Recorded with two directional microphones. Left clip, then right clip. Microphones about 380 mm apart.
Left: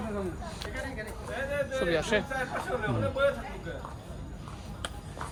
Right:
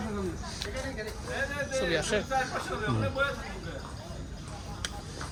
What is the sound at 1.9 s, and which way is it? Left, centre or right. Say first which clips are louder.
Speech: left 3 dB; left.